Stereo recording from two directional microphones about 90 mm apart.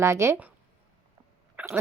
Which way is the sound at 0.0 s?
30° right (ahead or behind).